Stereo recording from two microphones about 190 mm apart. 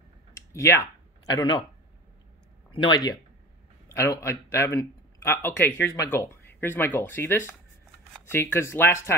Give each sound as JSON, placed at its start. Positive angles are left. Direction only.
{"t": 0.5, "sound": "speech", "side_deg": 15}
{"t": 2.7, "sound": "speech", "side_deg": 20}